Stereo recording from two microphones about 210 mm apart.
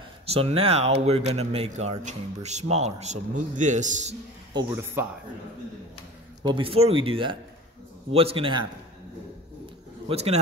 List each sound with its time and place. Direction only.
0.3 s speech: 30° right (ahead or behind)
6.4 s speech: 25° right (ahead or behind)
10.0 s speech: 30° right (ahead or behind)